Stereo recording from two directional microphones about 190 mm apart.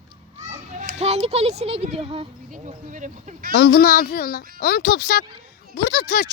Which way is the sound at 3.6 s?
55° left (ahead or behind).